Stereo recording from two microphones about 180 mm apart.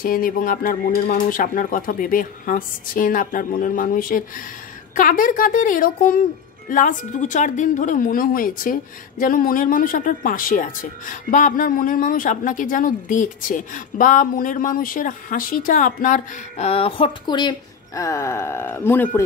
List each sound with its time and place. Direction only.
0.0 s speech: 50° left (ahead or behind); by 19.2 s 10° left (ahead or behind)